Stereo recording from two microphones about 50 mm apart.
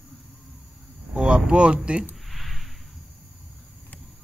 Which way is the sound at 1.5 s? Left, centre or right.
Right.